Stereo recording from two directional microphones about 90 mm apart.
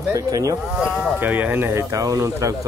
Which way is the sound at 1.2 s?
20° right (ahead or behind).